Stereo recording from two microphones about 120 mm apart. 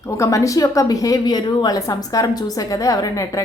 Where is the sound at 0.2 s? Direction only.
25° left (ahead or behind).